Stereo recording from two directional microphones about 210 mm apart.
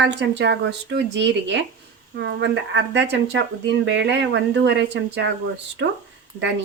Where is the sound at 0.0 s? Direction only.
55° right (ahead or behind).